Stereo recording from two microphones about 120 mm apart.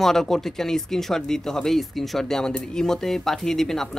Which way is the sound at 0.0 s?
5° left (ahead or behind).